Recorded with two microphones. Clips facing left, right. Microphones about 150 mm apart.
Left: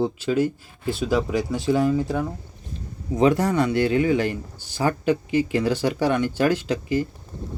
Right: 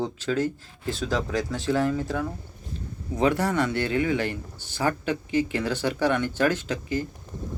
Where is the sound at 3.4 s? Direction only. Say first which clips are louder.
Left 4 dB; 15° left (ahead or behind).